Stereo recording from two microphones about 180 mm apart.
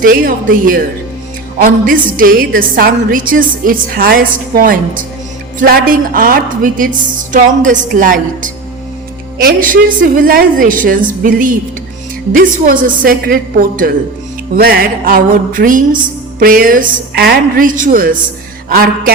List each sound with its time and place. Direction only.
0.0 s a woman's voice: 50° right (ahead or behind)
18.7 s music: 55° right (ahead or behind)